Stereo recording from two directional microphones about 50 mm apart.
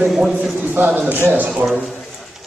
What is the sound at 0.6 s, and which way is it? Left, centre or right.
Speech, right.